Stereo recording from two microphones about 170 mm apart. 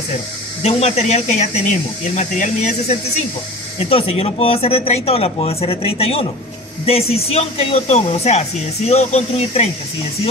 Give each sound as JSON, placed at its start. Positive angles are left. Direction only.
{"t": 0.6, "sound": "speech", "side_deg": 40}